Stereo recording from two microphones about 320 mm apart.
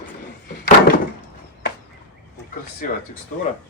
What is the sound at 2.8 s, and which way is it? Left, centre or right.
Speech, left.